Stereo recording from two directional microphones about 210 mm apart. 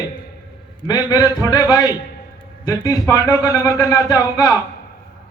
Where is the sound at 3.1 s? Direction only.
15° left (ahead or behind).